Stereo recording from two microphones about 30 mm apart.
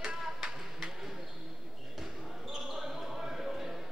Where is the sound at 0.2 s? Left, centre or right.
Centre.